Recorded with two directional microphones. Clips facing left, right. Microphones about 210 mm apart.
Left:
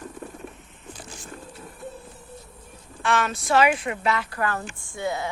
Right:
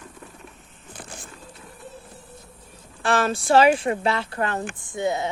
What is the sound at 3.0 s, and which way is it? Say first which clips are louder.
A woman's voice: right 3 dB; 35° right (ahead or behind).